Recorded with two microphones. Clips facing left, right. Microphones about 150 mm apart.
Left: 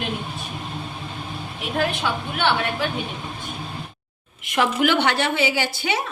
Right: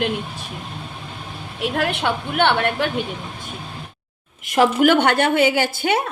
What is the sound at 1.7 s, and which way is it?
A woman's voice, 65° right (ahead or behind).